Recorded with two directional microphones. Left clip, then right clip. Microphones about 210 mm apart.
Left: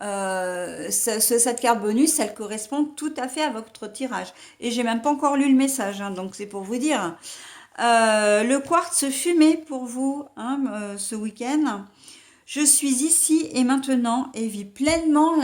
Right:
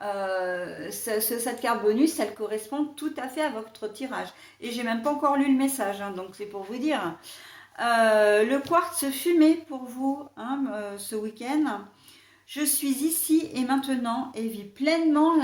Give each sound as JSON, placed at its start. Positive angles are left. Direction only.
{"t": 0.0, "sound": "speech", "side_deg": 50}